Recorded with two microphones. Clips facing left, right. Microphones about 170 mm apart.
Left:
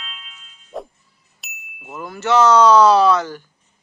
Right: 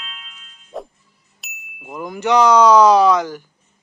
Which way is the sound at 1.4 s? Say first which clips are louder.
Right 1 dB; centre (ahead or behind).